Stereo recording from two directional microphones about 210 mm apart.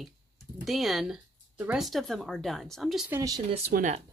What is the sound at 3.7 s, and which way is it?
Speech, 35° right (ahead or behind).